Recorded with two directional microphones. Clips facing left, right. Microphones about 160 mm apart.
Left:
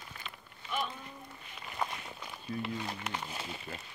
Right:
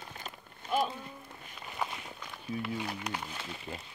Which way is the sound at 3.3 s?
15° left (ahead or behind).